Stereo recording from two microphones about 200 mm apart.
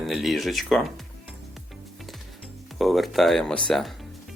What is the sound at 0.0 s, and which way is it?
Speech, centre (ahead or behind).